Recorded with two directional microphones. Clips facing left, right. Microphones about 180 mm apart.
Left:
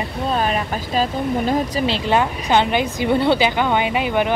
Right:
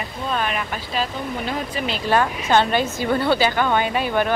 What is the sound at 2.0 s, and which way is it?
A woman's voice, 20° left (ahead or behind).